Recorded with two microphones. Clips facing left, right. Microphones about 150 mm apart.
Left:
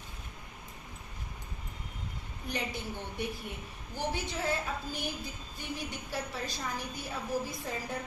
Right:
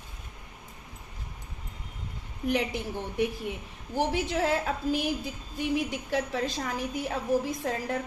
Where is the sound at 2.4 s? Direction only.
90° right.